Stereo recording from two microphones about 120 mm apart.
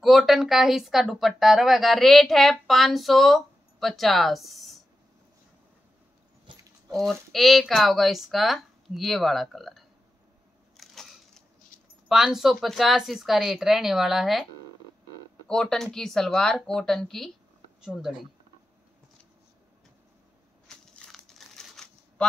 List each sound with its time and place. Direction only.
0.0 s a woman's voice: centre (ahead or behind)
6.5 s keys jangling: 45° right (ahead or behind)
6.9 s a woman's voice: centre (ahead or behind)
10.8 s crushing: 5° left (ahead or behind)
11.7 s a sound: 90° left
12.1 s a woman's voice: 5° right (ahead or behind)
15.4 s a woman's voice: 5° left (ahead or behind)
20.6 s crushing: 10° left (ahead or behind)